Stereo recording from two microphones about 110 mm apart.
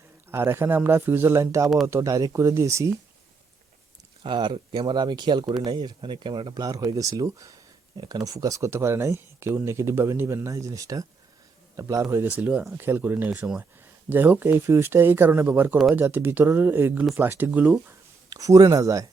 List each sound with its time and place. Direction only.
0.3 s speech: 20° right (ahead or behind)
4.2 s speech: 45° right (ahead or behind)
6.5 s speech: 35° right (ahead or behind)
12.2 s speech: 15° right (ahead or behind)
18.3 s speech: 30° right (ahead or behind)